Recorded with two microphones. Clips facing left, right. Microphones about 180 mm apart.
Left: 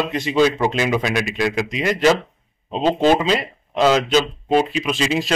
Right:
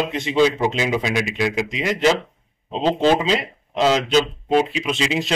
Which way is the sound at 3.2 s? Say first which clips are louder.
Left 1 dB; 20° right (ahead or behind).